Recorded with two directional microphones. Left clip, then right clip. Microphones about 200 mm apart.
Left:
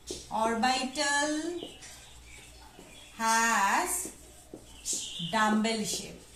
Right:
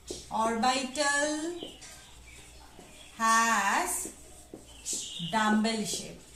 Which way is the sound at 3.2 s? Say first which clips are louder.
Right 2 dB; 10° right (ahead or behind).